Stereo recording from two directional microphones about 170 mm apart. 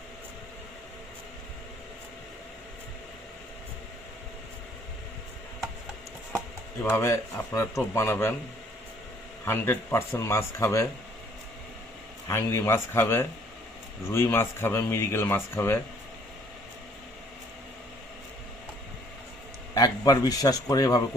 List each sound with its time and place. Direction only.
6.9 s speech: 15° left (ahead or behind)
9.4 s speech: 15° left (ahead or behind)
12.3 s speech: 15° left (ahead or behind)
19.7 s a man's voice: 20° left (ahead or behind)